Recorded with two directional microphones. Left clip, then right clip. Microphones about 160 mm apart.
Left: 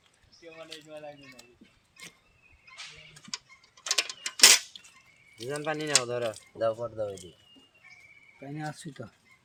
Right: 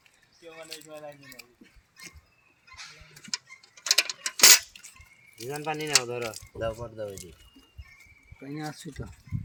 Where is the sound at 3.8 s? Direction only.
30° right (ahead or behind).